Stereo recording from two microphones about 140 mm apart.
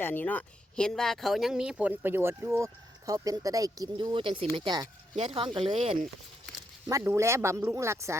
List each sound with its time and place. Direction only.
0.0 s speech: 15° left (ahead or behind); by 4.9 s 30° right (ahead or behind)
5.1 s speech: 40° right (ahead or behind)
6.8 s speech: 20° right (ahead or behind)